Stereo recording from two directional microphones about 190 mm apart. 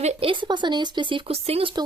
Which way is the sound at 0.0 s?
30° right (ahead or behind).